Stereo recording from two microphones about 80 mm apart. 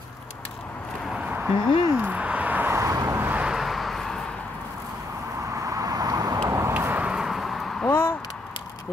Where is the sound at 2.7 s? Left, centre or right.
Right.